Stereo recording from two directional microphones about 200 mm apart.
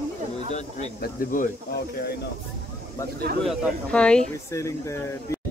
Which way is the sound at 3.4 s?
5° left (ahead or behind).